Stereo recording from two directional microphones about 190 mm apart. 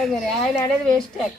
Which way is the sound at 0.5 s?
20° left (ahead or behind).